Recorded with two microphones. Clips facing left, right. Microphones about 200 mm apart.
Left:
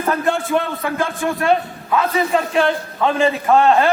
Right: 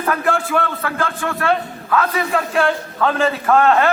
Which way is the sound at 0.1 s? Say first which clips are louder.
Left 1 dB; 25° left (ahead or behind).